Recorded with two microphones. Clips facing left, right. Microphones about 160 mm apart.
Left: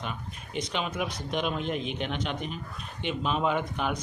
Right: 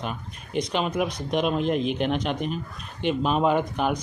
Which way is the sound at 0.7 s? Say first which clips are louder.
Right 6 dB; 40° right (ahead or behind).